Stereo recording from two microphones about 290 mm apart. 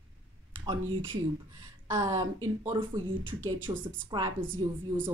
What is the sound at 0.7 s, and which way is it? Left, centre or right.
A woman's voice, centre.